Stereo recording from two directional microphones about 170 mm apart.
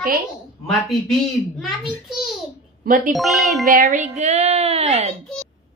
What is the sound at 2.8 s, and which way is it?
Speech, 50° right (ahead or behind).